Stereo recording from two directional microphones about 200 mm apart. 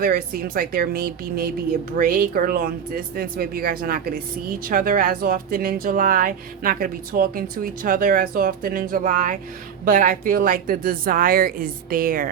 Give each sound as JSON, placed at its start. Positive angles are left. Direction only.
{"t": 0.0, "sound": "speech", "side_deg": -45}